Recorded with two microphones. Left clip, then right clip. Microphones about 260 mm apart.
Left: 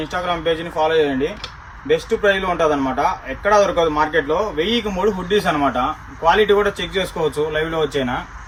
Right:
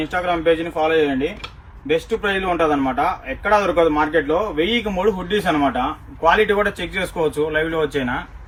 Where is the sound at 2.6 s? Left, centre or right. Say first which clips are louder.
Left 1 dB; centre.